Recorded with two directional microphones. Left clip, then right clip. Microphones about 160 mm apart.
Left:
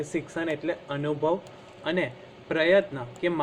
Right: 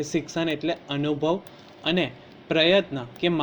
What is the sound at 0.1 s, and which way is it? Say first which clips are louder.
A man's voice: right 3 dB; 45° right (ahead or behind).